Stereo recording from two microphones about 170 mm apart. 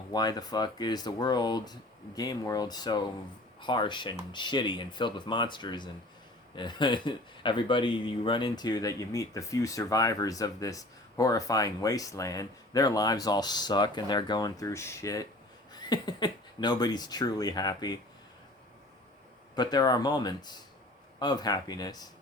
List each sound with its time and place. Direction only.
0.1 s speech: 25° left (ahead or behind)
19.5 s speech: 25° left (ahead or behind)